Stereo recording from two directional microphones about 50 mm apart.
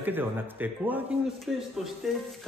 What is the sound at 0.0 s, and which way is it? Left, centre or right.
A man's voice, right.